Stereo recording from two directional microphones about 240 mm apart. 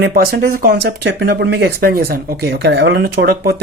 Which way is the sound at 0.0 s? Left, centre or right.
Right.